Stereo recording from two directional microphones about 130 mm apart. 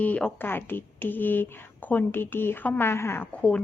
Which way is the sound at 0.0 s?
10° left (ahead or behind).